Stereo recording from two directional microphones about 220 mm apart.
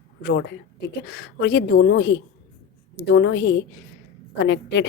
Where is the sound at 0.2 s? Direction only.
55° left (ahead or behind).